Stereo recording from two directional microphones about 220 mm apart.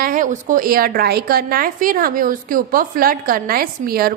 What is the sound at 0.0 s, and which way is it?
A woman's voice, 40° right (ahead or behind).